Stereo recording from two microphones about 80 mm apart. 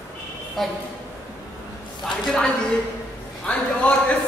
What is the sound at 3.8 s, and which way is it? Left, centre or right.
Speech, centre.